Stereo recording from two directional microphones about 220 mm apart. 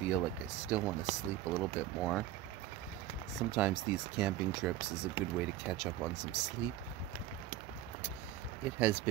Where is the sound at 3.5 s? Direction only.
5° right (ahead or behind).